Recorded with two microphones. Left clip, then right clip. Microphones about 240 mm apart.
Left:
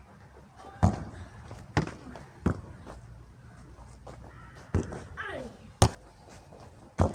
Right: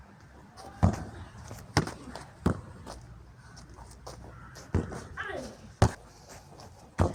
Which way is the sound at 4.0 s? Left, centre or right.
Right.